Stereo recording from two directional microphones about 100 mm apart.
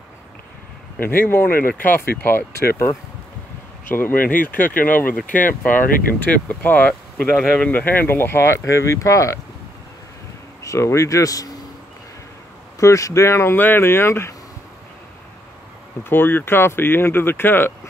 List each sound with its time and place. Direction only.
0.9 s speech: 20° left (ahead or behind)
10.6 s speech: 30° left (ahead or behind)
12.8 s speech: 30° left (ahead or behind)
16.0 s speech: 20° left (ahead or behind)